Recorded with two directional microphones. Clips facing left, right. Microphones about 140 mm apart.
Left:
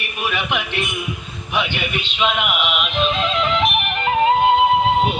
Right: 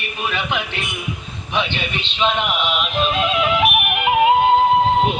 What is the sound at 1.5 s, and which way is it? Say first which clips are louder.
Speech: even; 25° right (ahead or behind).